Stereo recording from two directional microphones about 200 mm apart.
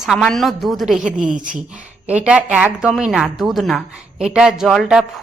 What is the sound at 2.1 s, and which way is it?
A woman's voice, 5° right (ahead or behind).